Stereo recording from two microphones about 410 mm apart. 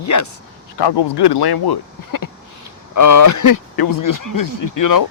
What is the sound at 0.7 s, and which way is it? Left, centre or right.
Speech, left.